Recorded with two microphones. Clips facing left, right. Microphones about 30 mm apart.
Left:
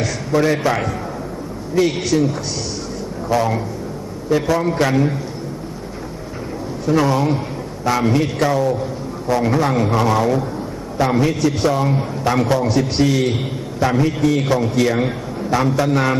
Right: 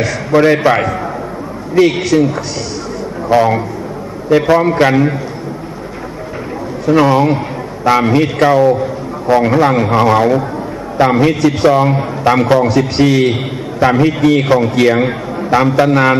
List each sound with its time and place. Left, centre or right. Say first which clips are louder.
0.3 s a man's voice: right 7 dB; right
3.3 s a man's voice: right 7 dB; right
6.9 s a man's voice: right 6 dB; right
12.6 s a man's voice: right 5 dB; centre
13.0 s a man's voice: right 8 dB; right